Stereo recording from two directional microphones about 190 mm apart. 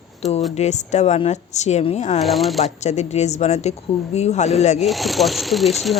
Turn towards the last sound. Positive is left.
turn(degrees=0)  # may be behind; listen again after turning